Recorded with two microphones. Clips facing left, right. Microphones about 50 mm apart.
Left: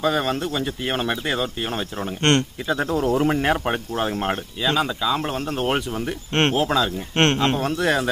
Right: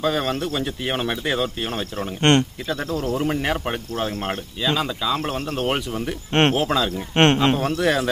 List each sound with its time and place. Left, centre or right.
0.0 s speech: centre
2.6 s speech: centre
3.2 s speech: centre
6.3 s speech: centre